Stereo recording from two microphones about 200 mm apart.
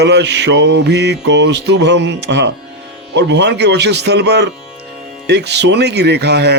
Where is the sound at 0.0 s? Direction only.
60° right (ahead or behind).